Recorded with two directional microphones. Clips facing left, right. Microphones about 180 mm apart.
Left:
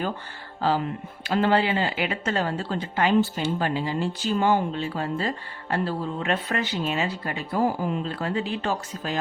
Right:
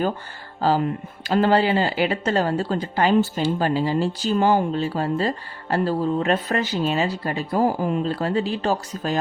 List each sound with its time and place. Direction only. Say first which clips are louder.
1.2 s speech: right 3 dB; 40° right (ahead or behind)